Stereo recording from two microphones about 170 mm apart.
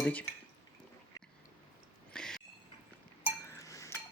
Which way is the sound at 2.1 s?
5° left (ahead or behind).